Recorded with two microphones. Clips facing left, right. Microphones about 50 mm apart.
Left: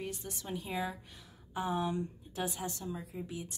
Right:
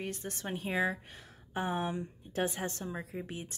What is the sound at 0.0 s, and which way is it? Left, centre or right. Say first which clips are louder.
A woman's voice: right 3 dB; right.